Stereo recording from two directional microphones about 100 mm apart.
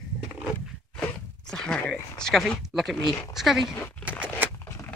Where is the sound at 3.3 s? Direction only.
5° right (ahead or behind).